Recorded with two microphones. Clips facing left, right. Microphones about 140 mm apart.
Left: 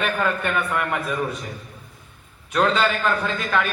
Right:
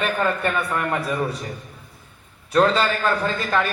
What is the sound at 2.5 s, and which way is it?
Speech, 35° right (ahead or behind).